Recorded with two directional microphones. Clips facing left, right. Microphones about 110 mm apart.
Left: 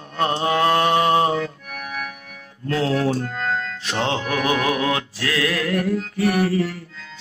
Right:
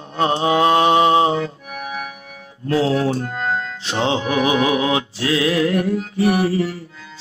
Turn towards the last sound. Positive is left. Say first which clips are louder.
# right 2 dB
turn(degrees=-25)  # may be behind; listen again after turning